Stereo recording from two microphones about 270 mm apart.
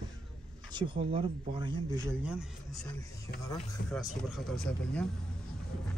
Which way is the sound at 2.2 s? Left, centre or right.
Centre.